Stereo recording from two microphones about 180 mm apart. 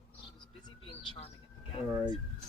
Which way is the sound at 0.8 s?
30° left (ahead or behind).